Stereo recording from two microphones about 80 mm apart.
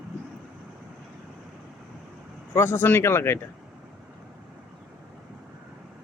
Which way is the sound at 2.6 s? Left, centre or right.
Left.